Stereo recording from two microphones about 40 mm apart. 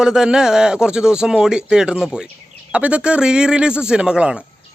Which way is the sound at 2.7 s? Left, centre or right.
Right.